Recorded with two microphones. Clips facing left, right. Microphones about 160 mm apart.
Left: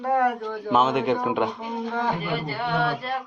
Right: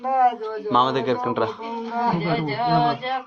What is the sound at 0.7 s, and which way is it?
Speech, 5° left (ahead or behind).